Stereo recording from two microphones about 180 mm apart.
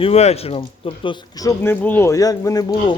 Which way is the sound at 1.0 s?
20° left (ahead or behind).